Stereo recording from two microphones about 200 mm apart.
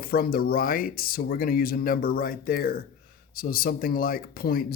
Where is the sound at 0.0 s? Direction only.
50° left (ahead or behind).